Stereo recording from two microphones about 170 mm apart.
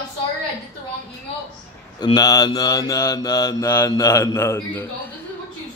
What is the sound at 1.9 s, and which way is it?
Mantra, 25° left (ahead or behind).